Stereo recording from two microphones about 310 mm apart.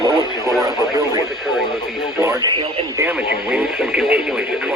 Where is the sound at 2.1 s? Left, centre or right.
Centre.